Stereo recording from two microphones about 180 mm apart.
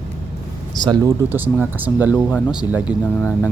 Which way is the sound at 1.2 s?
10° right (ahead or behind).